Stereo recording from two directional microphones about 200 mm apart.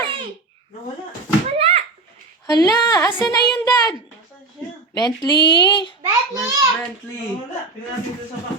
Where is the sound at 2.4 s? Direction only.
20° left (ahead or behind).